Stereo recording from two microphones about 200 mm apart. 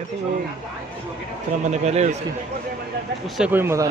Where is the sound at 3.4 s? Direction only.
10° right (ahead or behind).